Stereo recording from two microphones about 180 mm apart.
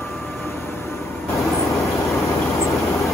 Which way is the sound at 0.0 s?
Centre (ahead or behind).